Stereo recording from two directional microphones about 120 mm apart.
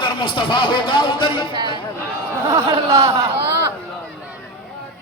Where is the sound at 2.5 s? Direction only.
25° right (ahead or behind).